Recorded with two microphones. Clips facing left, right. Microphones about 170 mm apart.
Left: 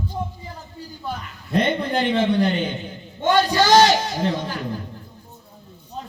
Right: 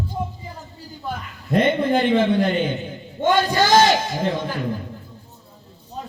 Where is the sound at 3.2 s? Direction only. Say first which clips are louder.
Left 1 dB; 50° right (ahead or behind).